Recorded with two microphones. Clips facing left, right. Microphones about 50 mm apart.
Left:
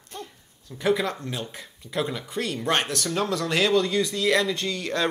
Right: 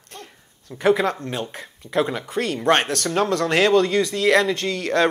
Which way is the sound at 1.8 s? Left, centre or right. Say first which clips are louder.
Right 6 dB; right.